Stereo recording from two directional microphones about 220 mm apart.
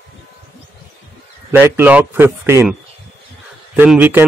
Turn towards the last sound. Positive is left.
turn(degrees=-10)  # may be behind; listen again after turning